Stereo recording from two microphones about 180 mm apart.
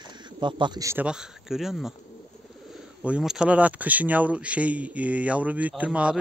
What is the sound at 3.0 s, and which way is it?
Speech, 5° right (ahead or behind).